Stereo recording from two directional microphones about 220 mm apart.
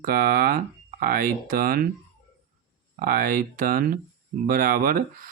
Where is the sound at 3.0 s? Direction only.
40° right (ahead or behind).